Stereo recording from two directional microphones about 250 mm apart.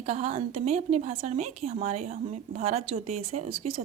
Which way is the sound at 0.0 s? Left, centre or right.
Right.